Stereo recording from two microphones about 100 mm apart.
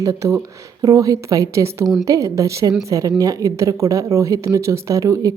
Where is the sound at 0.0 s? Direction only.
30° right (ahead or behind).